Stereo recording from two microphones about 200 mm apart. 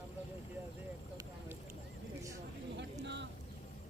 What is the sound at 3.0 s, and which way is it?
Boat, 60° right (ahead or behind).